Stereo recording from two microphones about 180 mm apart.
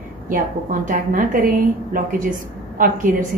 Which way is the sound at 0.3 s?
45° right (ahead or behind).